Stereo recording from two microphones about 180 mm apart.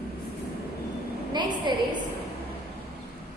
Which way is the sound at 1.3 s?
25° right (ahead or behind).